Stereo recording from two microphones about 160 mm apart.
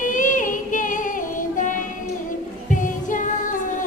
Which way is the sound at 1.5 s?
55° left (ahead or behind).